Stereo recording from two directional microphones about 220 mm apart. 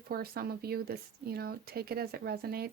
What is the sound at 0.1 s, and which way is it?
Speech, 45° right (ahead or behind).